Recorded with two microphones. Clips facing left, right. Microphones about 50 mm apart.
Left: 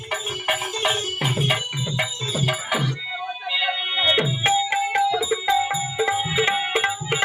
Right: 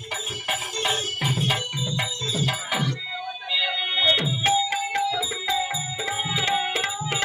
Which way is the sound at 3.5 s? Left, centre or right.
Centre.